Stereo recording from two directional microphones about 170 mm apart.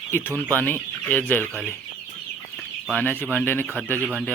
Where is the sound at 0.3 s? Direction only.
15° right (ahead or behind).